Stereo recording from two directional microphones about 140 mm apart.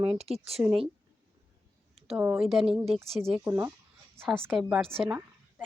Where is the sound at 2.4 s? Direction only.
Centre (ahead or behind).